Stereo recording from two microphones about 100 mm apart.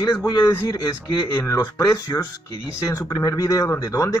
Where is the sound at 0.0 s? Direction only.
40° left (ahead or behind).